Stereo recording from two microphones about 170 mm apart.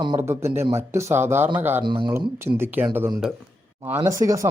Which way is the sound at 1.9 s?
25° right (ahead or behind).